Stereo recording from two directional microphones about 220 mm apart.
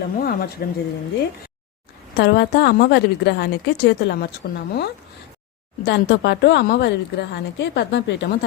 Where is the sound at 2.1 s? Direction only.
50° left (ahead or behind).